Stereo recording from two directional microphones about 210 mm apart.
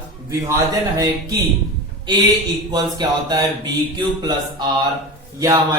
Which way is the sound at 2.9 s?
20° right (ahead or behind).